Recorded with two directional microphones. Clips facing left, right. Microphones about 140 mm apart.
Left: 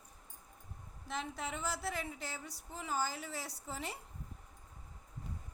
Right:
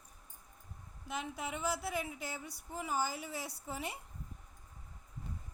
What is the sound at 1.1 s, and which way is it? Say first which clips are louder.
A woman's voice: right 1 dB; 10° right (ahead or behind).